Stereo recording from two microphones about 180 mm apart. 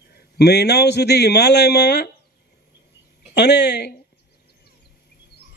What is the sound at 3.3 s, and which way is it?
Speech, 70° left (ahead or behind).